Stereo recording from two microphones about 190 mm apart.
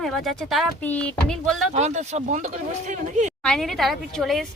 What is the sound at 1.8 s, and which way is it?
Speech, 35° right (ahead or behind).